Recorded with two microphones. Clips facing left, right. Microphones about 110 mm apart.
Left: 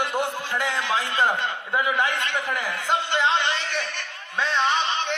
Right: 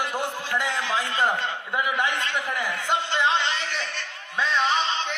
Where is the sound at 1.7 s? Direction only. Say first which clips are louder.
Left 2 dB; 25° left (ahead or behind).